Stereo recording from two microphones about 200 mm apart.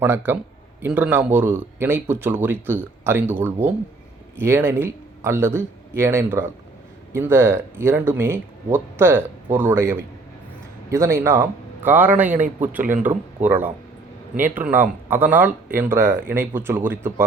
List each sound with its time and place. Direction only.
0.3 s speech: 10° right (ahead or behind)
12.8 s speech: 40° right (ahead or behind)
13.1 s speech: 10° right (ahead or behind)